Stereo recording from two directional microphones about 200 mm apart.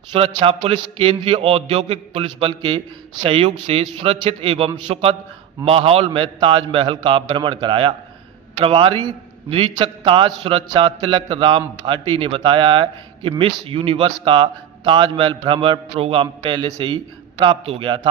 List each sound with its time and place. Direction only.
0.1 s a man's voice: 25° right (ahead or behind)